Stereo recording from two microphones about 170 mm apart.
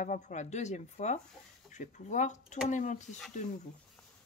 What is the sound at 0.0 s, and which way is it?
Speech, 45° left (ahead or behind).